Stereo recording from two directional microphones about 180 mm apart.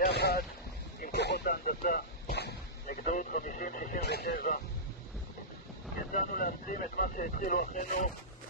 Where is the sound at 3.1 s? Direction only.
45° left (ahead or behind); by 4.4 s 65° left (ahead or behind).